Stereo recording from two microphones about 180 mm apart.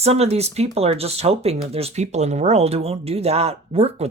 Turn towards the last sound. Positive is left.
turn(degrees=-35)  # may be behind; listen again after turning